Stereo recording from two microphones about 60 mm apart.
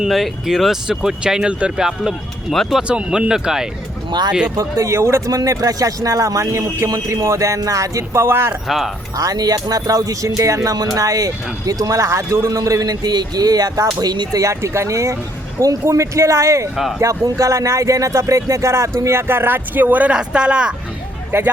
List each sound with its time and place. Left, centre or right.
0.1 s speech: centre
2.5 s speech: centre
2.8 s speech: centre
4.5 s speech: right
4.9 s a man's voice: right
5.3 s speech: right
8.2 s a man's voice: right
8.6 s speech: centre
9.1 s speech: right
12.0 s a man's voice: right
12.5 s speech: right
20.1 s speech: centre
21.3 s speech: right